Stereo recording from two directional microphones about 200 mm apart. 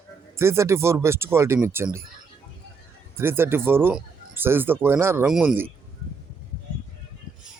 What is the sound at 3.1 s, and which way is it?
Speech, 10° right (ahead or behind).